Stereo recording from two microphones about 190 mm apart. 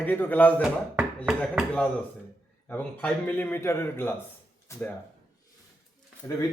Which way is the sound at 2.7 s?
10° left (ahead or behind).